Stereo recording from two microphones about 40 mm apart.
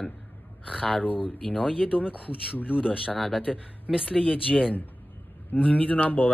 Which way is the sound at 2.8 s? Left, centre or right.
Right.